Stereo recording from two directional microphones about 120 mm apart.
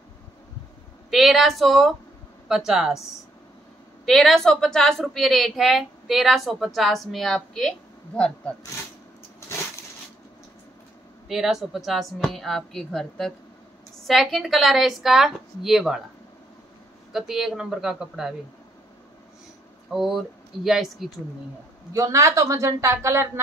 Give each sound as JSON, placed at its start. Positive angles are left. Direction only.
{"t": 1.1, "sound": "a woman's voice", "side_deg": 0}
{"t": 4.0, "sound": "a woman's voice", "side_deg": 0}
{"t": 11.2, "sound": "a woman's voice", "side_deg": 0}
{"t": 17.1, "sound": "a woman's voice", "side_deg": -5}
{"t": 19.9, "sound": "a woman's voice", "side_deg": -5}
{"t": 21.9, "sound": "speech", "side_deg": -25}